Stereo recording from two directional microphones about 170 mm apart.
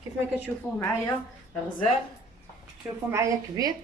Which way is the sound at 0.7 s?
15° left (ahead or behind).